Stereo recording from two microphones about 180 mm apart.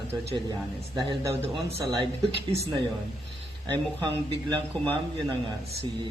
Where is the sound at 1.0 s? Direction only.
25° right (ahead or behind).